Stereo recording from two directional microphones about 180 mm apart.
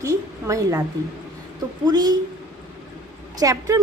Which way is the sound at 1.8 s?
20° right (ahead or behind).